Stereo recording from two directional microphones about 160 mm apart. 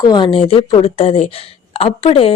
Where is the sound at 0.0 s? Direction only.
30° left (ahead or behind).